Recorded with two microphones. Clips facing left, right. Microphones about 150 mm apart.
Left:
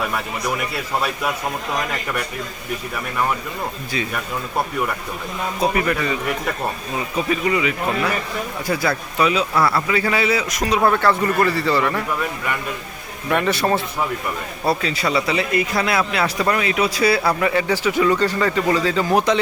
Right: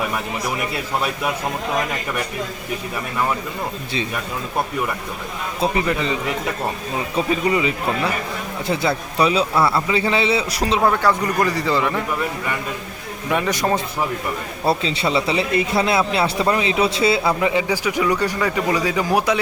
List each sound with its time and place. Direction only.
5.5 s a man's voice: 20° right (ahead or behind)
7.2 s a man's voice: 30° right (ahead or behind)
10.8 s a man's voice: 10° right (ahead or behind)
13.3 s a man's voice: 15° right (ahead or behind)
14.7 s a man's voice: 25° right (ahead or behind); by 19.4 s 10° right (ahead or behind)